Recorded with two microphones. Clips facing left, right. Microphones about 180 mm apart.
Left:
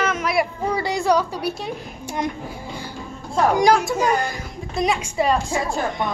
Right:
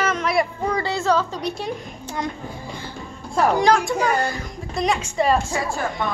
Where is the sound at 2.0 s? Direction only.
20° left (ahead or behind).